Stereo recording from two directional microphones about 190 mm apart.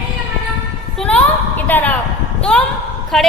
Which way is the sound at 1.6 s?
10° left (ahead or behind).